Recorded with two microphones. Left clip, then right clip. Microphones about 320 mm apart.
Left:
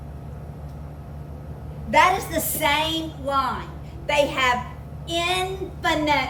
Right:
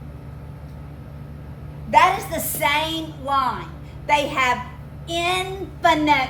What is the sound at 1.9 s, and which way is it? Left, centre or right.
A woman's voice, centre.